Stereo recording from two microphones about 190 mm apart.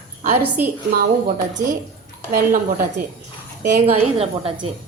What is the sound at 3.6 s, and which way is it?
A woman's voice, 35° right (ahead or behind).